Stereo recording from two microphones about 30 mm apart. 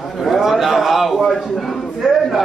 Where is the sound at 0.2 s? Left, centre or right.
Centre.